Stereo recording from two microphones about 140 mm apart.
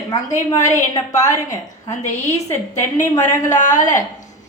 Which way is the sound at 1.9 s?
55° left (ahead or behind).